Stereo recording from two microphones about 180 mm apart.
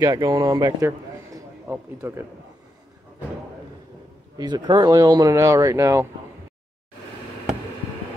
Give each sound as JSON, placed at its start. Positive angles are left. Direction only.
{"t": 0.0, "sound": "a man's voice", "side_deg": -20}
{"t": 4.4, "sound": "speech", "side_deg": -25}